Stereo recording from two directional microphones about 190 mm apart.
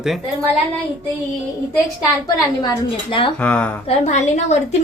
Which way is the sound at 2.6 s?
25° left (ahead or behind).